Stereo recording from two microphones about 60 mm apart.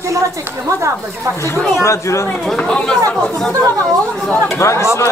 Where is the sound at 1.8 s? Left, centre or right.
Left.